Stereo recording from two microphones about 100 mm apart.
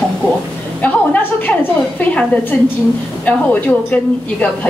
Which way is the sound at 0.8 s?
15° left (ahead or behind).